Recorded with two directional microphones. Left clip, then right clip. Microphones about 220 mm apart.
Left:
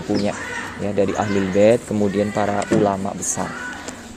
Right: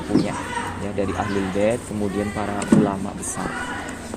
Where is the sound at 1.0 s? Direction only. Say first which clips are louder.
Left 6 dB; 60° left (ahead or behind).